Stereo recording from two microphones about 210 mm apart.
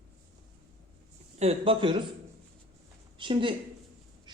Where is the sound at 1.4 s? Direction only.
25° right (ahead or behind).